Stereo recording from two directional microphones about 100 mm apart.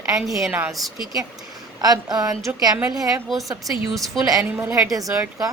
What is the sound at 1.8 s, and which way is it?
Speech, 40° right (ahead or behind).